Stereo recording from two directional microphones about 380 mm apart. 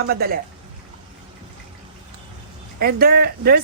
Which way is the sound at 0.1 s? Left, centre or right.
Right.